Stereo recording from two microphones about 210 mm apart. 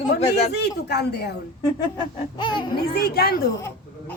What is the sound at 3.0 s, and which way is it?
Speech, 50° left (ahead or behind).